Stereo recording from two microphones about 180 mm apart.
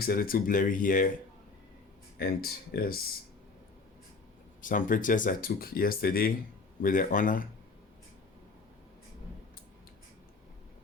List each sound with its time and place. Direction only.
0.0 s speech: 55° left (ahead or behind)
2.1 s speech: 55° left (ahead or behind)
4.6 s speech: 45° left (ahead or behind)